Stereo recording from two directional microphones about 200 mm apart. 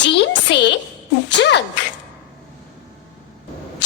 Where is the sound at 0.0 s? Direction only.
60° left (ahead or behind).